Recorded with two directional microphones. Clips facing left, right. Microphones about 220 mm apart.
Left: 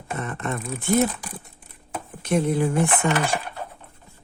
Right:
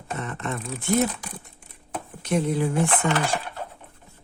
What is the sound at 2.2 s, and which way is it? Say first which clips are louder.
Speech: left 2 dB; 50° left (ahead or behind).